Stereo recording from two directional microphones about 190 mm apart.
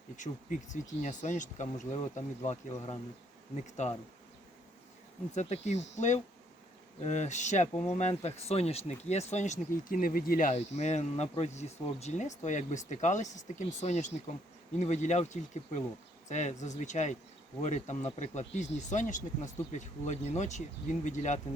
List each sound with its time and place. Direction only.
1.0 s speech: 40° left (ahead or behind)
5.3 s speech: 35° left (ahead or behind)